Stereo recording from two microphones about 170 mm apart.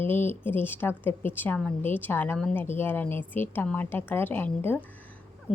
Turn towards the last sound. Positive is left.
turn(degrees=10)  # may be behind; listen again after turning